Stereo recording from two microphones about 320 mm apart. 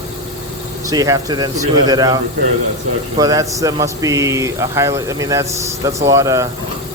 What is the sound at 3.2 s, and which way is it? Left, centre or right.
Speech, centre.